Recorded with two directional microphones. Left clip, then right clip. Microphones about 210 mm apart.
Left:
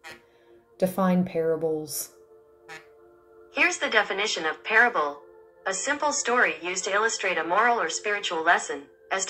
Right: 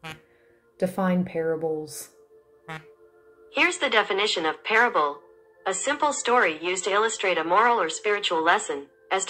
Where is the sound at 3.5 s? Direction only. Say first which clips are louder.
Right 1 dB; 35° right (ahead or behind).